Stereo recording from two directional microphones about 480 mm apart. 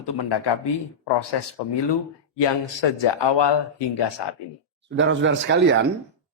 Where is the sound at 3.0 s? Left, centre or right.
Left.